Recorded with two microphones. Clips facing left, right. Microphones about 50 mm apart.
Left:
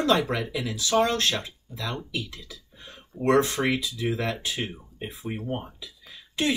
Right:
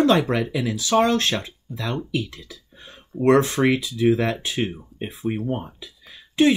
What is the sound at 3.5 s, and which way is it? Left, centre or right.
Speech, right.